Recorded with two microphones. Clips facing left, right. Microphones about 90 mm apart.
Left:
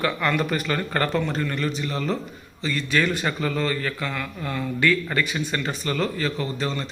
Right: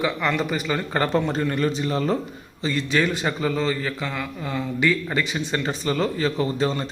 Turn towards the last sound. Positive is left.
turn(degrees=-30)  # may be behind; listen again after turning